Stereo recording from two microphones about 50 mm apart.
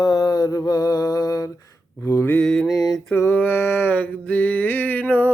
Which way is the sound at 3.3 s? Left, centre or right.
Left.